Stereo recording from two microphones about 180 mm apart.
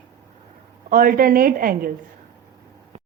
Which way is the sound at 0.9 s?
50° right (ahead or behind).